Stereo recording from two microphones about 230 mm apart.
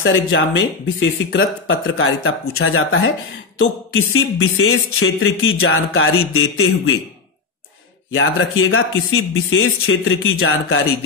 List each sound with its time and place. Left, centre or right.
0.0 s speech: left
8.1 s speech: left